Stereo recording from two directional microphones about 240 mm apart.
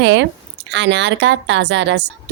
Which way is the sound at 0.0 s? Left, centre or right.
Right.